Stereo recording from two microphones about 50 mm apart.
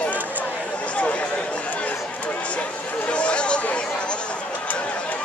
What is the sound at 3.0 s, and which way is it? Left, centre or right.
Speech, left.